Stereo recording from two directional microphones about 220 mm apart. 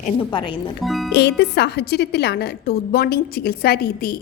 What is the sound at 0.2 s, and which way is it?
Speech, 20° left (ahead or behind).